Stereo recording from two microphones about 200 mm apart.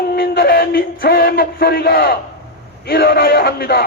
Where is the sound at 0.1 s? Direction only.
50° left (ahead or behind).